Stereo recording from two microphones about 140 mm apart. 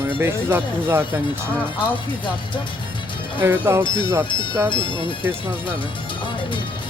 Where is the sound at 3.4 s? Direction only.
15° right (ahead or behind).